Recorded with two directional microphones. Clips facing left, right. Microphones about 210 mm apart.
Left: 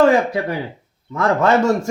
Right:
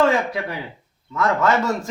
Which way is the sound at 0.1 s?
35° left (ahead or behind).